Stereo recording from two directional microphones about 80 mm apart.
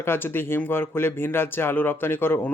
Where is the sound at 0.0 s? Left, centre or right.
Left.